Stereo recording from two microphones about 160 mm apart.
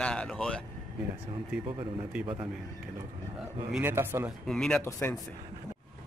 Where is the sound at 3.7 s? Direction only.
15° right (ahead or behind).